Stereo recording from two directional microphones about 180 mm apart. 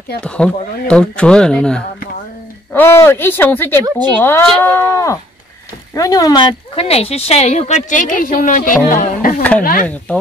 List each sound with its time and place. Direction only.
0.2 s a woman's voice: 5° left (ahead or behind); by 9.8 s 50° left (ahead or behind)